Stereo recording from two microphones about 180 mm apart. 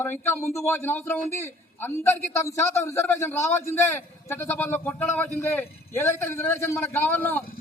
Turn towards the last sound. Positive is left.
turn(degrees=10)  # may be behind; listen again after turning